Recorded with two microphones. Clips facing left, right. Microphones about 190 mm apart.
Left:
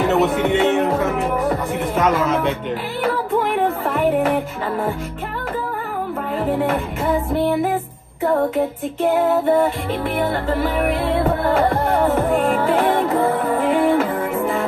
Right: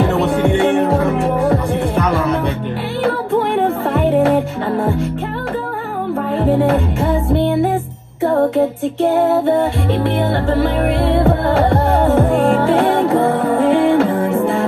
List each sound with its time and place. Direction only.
0.0 s music: 30° right (ahead or behind)
3.0 s music: 30° right (ahead or behind)
6.3 s music: 30° right (ahead or behind)